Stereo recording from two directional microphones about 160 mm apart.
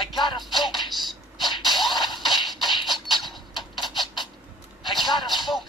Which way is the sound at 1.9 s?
25° left (ahead or behind).